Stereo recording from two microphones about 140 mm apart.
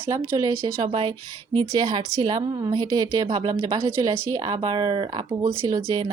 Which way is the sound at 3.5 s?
25° right (ahead or behind).